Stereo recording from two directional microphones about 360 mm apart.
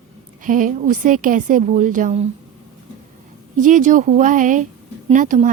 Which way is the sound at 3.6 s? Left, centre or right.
Right.